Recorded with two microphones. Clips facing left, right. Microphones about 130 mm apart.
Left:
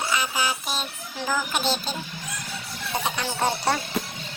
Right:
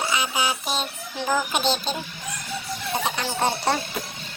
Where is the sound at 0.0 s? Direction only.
15° right (ahead or behind).